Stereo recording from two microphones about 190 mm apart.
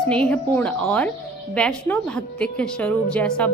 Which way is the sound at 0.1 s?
5° left (ahead or behind).